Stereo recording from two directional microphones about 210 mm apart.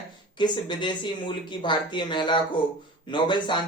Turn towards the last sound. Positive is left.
turn(degrees=20)  # may be behind; listen again after turning